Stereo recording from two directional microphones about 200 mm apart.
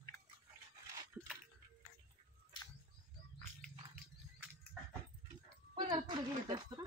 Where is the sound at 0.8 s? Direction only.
20° right (ahead or behind).